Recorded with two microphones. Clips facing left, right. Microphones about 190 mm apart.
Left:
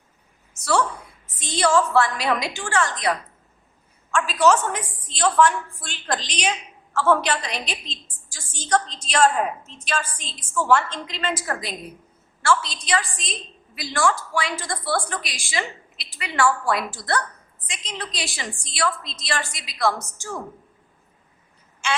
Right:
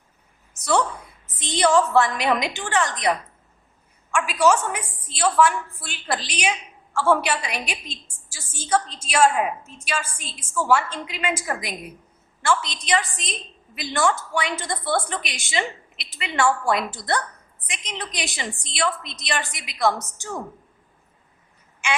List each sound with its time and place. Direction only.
0.6 s a woman's voice: 20° right (ahead or behind)
4.1 s a woman's voice: 10° right (ahead or behind)